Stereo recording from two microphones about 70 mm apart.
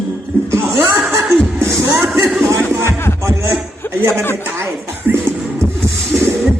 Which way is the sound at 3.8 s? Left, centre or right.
Left.